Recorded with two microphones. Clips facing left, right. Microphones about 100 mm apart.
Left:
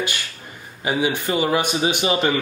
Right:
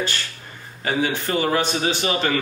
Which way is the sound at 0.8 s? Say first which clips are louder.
Left 1 dB; 15° left (ahead or behind).